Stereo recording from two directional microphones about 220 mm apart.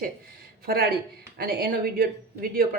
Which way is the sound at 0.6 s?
45° right (ahead or behind).